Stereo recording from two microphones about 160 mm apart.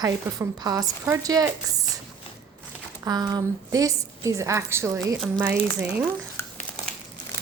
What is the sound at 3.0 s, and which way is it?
A woman's voice, 25° right (ahead or behind).